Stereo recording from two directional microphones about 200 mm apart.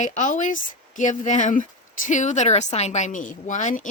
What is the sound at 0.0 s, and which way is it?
Speech, 40° left (ahead or behind).